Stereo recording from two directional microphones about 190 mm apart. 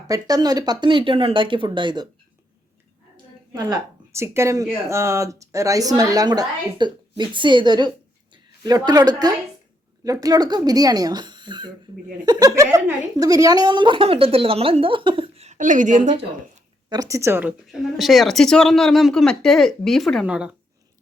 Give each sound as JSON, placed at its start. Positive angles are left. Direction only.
{"t": 0.1, "sound": "speech", "side_deg": -20}
{"t": 3.5, "sound": "a woman's voice", "side_deg": -20}
{"t": 16.9, "sound": "a woman's voice", "side_deg": -15}
{"t": 17.7, "sound": "speech", "side_deg": 0}